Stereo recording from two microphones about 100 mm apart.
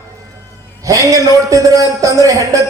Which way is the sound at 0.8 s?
35° right (ahead or behind).